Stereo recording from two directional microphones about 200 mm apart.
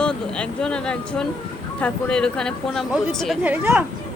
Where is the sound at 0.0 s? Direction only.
5° left (ahead or behind).